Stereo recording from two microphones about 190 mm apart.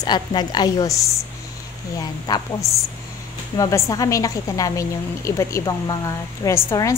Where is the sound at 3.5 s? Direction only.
20° left (ahead or behind).